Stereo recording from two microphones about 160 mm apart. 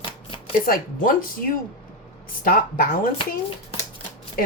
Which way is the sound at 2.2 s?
65° left (ahead or behind).